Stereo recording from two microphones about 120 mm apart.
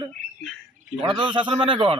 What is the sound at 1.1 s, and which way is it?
Speech, 40° right (ahead or behind).